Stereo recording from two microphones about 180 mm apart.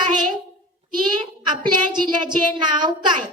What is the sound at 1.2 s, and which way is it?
A woman's voice, 25° right (ahead or behind).